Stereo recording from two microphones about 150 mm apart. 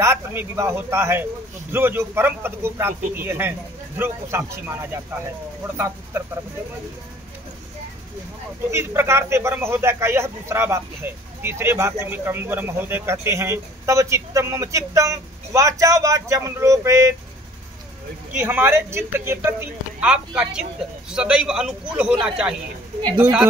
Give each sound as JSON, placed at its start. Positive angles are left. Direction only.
{"t": 0.0, "sound": "speech", "side_deg": -15}
{"t": 8.6, "sound": "speech", "side_deg": -15}
{"t": 18.4, "sound": "a man's voice", "side_deg": -15}